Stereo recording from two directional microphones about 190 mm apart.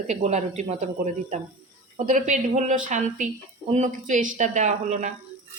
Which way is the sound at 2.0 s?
40° right (ahead or behind).